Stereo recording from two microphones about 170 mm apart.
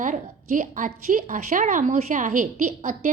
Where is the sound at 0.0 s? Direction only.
50° right (ahead or behind).